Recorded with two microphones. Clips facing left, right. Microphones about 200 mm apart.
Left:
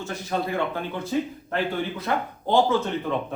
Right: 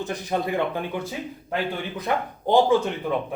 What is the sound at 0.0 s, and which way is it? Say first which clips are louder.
Speech: right 2 dB; 15° right (ahead or behind).